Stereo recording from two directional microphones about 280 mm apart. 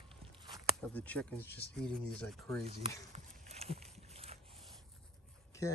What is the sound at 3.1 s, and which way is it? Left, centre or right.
Horse, right.